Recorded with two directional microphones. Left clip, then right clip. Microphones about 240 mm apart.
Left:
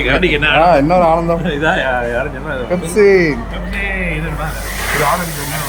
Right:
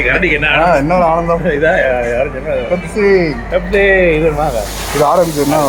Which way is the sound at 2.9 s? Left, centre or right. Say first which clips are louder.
Left 2 dB; centre.